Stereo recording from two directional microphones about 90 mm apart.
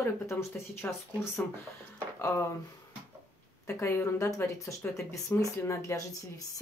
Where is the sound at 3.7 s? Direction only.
30° left (ahead or behind).